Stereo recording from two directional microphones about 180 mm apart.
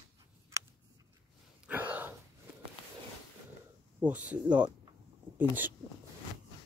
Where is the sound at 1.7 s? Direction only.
10° right (ahead or behind).